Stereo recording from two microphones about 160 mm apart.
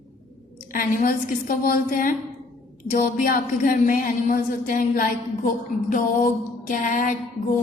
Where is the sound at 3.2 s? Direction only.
60° left (ahead or behind).